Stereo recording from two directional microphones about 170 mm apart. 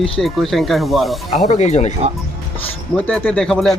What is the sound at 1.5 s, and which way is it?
Speech, 40° left (ahead or behind).